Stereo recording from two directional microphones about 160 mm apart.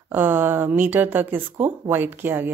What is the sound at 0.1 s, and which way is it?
Speech, 15° right (ahead or behind).